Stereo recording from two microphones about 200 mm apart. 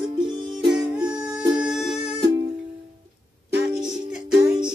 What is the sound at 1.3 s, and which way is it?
Music, 5° right (ahead or behind).